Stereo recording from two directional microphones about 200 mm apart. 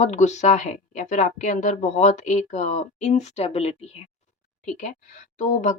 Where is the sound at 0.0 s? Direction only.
35° left (ahead or behind).